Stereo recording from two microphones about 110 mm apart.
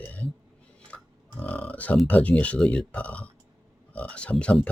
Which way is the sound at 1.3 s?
15° left (ahead or behind).